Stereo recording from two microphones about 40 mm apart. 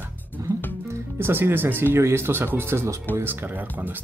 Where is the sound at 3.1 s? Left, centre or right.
Right.